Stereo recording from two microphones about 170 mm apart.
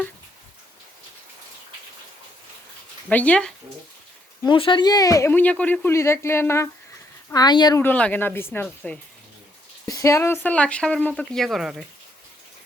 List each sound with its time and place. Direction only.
3.1 s speech: 10° left (ahead or behind)
4.4 s speech: 30° left (ahead or behind)
7.8 s speech: 10° left (ahead or behind)